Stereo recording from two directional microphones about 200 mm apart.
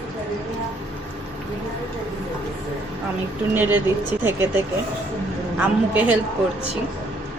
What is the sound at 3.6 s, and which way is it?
Speech, 10° right (ahead or behind).